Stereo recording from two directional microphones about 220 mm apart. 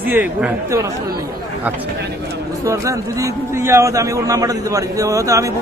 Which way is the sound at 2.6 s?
15° right (ahead or behind).